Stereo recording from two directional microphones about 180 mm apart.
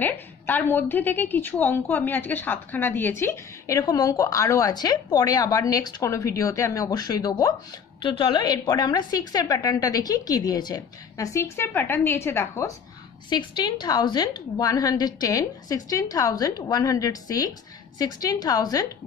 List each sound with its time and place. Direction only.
0.0 s a woman's voice: 10° left (ahead or behind)